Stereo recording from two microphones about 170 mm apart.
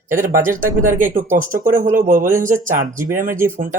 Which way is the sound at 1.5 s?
55° right (ahead or behind).